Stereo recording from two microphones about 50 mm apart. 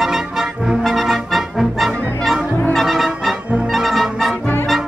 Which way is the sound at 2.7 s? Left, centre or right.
Centre.